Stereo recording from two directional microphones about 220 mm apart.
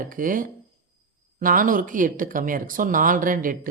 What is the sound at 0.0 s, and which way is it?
Speech, 40° right (ahead or behind).